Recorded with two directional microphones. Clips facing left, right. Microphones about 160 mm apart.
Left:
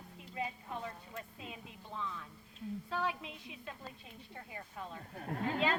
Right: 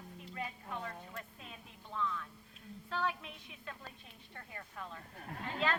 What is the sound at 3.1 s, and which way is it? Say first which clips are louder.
A woman's voice: left 1 dB; 25° left (ahead or behind).